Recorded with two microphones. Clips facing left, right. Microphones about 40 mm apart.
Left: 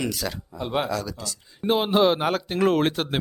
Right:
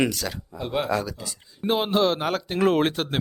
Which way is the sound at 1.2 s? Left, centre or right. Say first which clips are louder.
Left 2 dB; centre.